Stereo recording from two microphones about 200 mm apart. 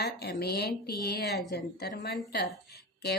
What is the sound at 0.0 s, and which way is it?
Speech, 50° left (ahead or behind).